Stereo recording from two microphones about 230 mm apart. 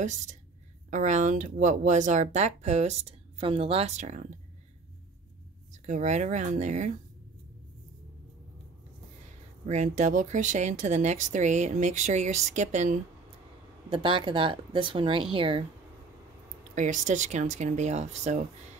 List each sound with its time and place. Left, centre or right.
0.0 s speech: right
5.7 s speech: right
9.7 s speech: right
13.8 s speech: right
16.7 s speech: right